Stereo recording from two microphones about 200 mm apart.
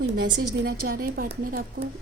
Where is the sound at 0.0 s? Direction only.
60° right (ahead or behind).